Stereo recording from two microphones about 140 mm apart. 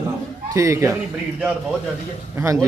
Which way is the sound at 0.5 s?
20° right (ahead or behind).